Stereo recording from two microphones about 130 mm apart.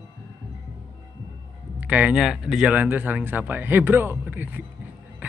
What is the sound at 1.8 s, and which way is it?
Speech, 10° right (ahead or behind).